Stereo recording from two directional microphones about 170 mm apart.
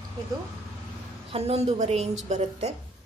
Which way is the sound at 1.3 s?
35° right (ahead or behind).